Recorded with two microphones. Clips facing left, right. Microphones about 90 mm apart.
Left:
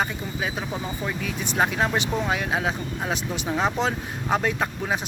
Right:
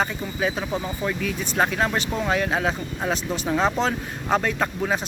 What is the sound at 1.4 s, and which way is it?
Speech, 15° left (ahead or behind).